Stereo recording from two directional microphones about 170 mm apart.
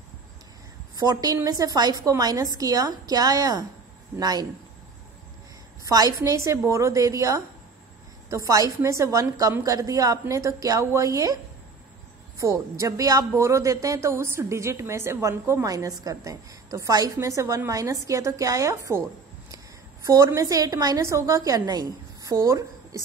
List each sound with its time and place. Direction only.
0.9 s a woman's voice: 25° right (ahead or behind)
5.9 s a woman's voice: 20° right (ahead or behind)
12.4 s a woman's voice: 20° right (ahead or behind)
20.1 s a woman's voice: 20° right (ahead or behind)